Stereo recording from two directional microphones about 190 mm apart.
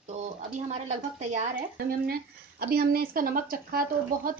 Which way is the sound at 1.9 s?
55° right (ahead or behind).